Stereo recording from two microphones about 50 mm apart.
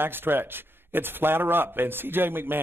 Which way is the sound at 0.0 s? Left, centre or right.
Right.